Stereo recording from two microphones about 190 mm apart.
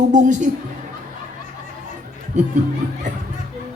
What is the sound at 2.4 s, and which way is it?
Speech, 40° right (ahead or behind).